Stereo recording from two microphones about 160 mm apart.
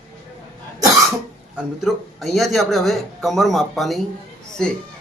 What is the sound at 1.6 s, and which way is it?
Speech, centre (ahead or behind).